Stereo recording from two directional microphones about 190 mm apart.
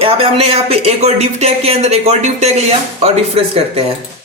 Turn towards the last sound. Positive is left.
turn(degrees=-30)  # may be behind; listen again after turning